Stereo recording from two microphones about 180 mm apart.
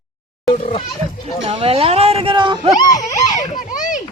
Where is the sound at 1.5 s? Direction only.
30° right (ahead or behind).